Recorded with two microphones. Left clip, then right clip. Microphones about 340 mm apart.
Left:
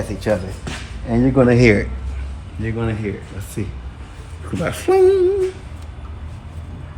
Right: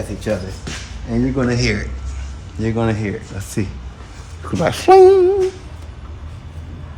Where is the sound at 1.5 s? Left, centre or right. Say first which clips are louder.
Left 6 dB; left.